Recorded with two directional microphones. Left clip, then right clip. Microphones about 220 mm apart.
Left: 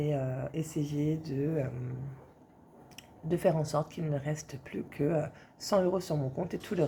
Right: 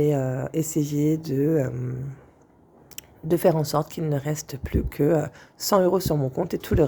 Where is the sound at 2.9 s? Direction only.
45° right (ahead or behind).